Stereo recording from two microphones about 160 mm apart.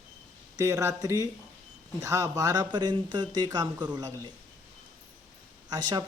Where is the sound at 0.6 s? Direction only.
20° right (ahead or behind).